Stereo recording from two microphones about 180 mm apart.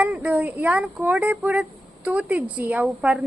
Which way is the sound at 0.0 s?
10° right (ahead or behind).